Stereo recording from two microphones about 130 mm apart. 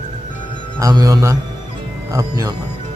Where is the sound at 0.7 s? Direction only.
25° right (ahead or behind).